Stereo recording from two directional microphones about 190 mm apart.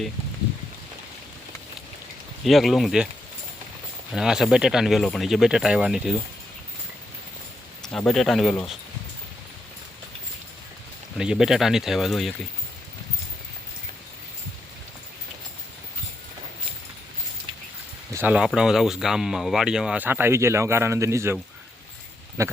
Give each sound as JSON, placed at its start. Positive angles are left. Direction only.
{"t": 2.4, "sound": "speech", "side_deg": 0}
{"t": 4.1, "sound": "speech", "side_deg": 0}
{"t": 7.9, "sound": "speech", "side_deg": 0}
{"t": 11.2, "sound": "speech", "side_deg": -5}
{"t": 18.1, "sound": "speech", "side_deg": -10}
{"t": 22.4, "sound": "speech", "side_deg": -15}